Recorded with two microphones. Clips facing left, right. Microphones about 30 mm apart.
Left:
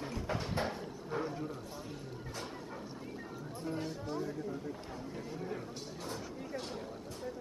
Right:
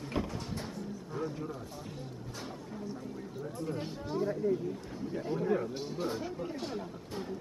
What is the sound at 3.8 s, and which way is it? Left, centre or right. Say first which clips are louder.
Speech: right 4 dB; right.